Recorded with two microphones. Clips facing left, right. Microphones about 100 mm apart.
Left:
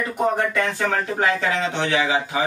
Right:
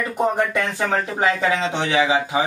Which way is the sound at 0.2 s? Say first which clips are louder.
Right 1 dB; 20° right (ahead or behind).